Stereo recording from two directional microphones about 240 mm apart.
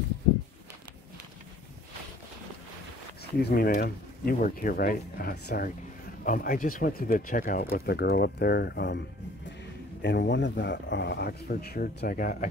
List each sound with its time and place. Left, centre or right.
3.3 s speech: left
10.0 s speech: left